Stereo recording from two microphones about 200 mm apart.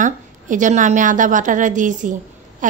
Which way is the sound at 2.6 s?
40° right (ahead or behind).